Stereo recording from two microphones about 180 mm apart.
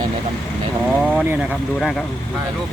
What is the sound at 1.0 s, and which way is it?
Speech, 10° right (ahead or behind).